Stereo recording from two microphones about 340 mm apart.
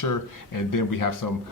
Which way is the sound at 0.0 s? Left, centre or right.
Left.